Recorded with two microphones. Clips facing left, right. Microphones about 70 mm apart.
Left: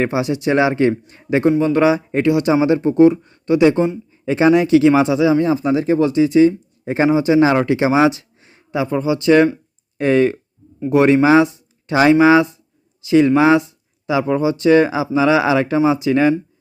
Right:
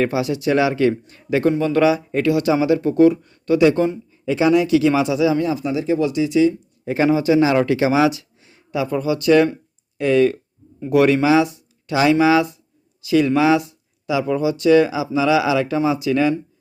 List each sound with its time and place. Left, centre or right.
0.0 s speech: left